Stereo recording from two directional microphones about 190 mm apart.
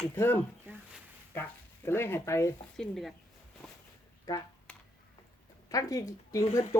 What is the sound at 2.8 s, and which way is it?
Speech, centre (ahead or behind).